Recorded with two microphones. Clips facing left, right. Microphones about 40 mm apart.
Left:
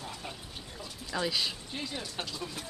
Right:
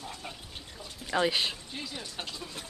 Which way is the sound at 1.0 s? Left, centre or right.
Right.